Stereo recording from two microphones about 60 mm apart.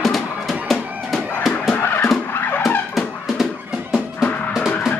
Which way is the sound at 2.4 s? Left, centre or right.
Left.